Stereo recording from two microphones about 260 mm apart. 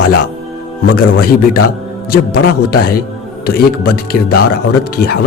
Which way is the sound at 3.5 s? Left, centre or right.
Left.